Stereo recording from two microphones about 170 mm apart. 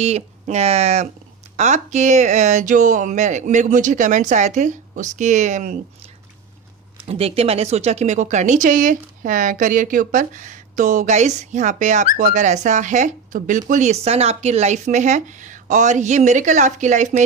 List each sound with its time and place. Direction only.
0.0 s speech: 40° right (ahead or behind)
7.1 s speech: 35° right (ahead or behind)